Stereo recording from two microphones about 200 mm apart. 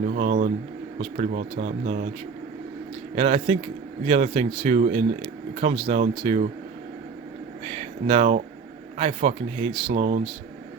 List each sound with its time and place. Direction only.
0.0 s speech: 40° right (ahead or behind)
3.2 s speech: 35° right (ahead or behind)
7.6 s speech: 30° right (ahead or behind)